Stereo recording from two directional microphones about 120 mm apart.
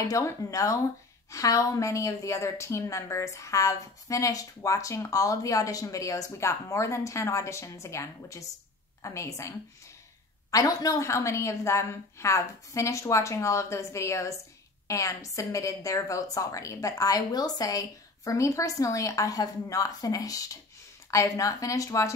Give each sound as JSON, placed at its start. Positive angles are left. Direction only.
{"t": 0.1, "sound": "a woman's voice", "side_deg": 25}